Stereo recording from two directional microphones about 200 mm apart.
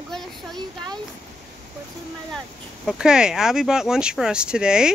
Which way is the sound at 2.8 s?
5° right (ahead or behind).